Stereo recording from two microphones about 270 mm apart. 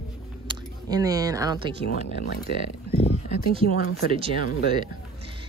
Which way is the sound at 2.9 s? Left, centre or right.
Left.